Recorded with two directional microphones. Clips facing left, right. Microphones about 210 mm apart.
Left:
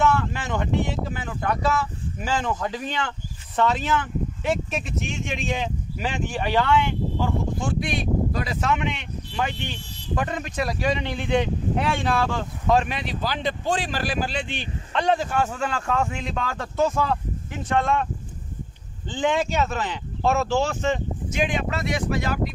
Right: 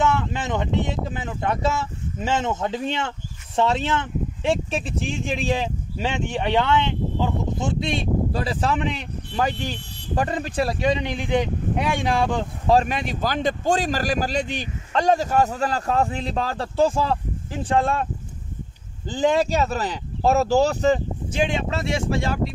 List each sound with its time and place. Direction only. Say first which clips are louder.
0.0 s speech: even; 20° right (ahead or behind)
12.6 s speech: right 2 dB; 40° right (ahead or behind)
19.0 s speech: right 3 dB; 40° right (ahead or behind)